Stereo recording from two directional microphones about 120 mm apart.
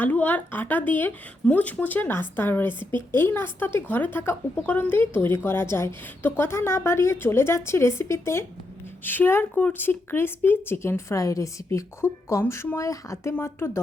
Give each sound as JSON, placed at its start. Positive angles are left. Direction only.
{"t": 0.0, "sound": "a woman's voice", "side_deg": 15}